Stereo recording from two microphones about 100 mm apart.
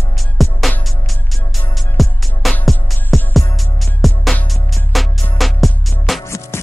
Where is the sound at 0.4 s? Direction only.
Centre (ahead or behind).